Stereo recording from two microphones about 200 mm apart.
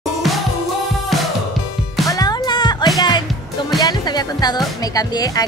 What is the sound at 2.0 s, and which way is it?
Music, 20° left (ahead or behind).